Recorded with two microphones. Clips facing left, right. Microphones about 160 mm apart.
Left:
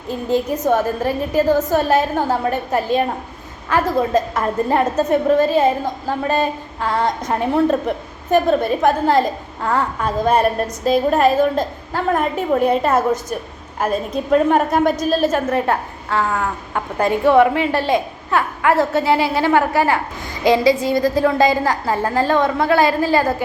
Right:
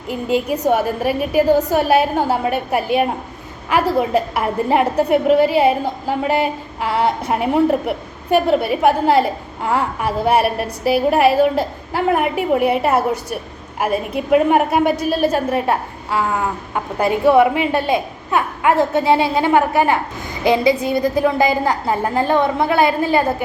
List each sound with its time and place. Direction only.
0.1 s a woman's voice: 15° right (ahead or behind)
15.4 s a woman's voice: 20° right (ahead or behind)